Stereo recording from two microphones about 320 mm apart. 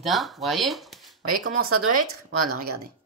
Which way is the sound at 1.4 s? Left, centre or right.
Right.